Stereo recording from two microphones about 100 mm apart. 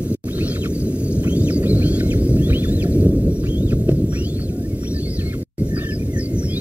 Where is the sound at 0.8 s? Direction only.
15° right (ahead or behind).